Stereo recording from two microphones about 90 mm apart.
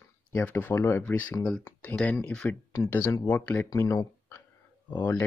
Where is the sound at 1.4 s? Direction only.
10° left (ahead or behind).